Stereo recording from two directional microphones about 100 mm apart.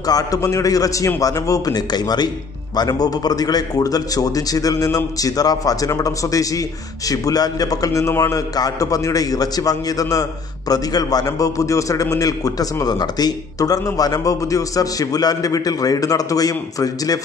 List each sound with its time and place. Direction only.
0.0 s a man's voice: 35° left (ahead or behind)